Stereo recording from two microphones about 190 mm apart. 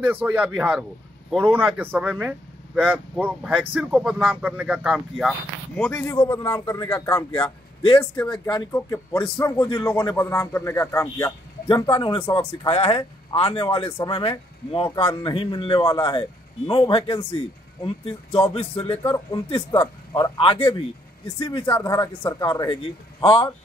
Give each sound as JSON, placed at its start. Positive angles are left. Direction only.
{"t": 0.0, "sound": "speech", "side_deg": -5}
{"t": 8.0, "sound": "speech", "side_deg": 5}
{"t": 8.7, "sound": "speech", "side_deg": 20}
{"t": 12.2, "sound": "speech", "side_deg": 10}
{"t": 12.6, "sound": "speech", "side_deg": 30}